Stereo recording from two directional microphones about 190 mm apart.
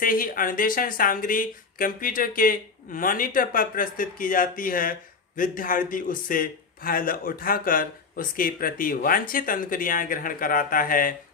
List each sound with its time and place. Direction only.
0.0 s a man's voice: 45° left (ahead or behind)